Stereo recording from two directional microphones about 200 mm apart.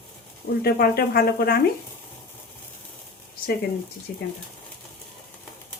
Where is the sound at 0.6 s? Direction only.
50° left (ahead or behind).